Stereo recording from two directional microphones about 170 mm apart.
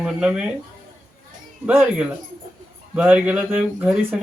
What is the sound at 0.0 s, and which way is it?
Speech, 5° right (ahead or behind).